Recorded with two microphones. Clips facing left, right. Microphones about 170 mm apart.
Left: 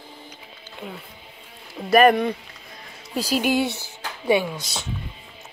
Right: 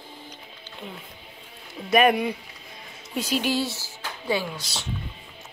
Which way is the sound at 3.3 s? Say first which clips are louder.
Left 4 dB; 50° left (ahead or behind).